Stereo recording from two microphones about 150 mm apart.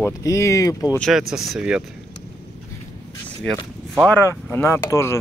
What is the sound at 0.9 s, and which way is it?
Speech, 5° left (ahead or behind).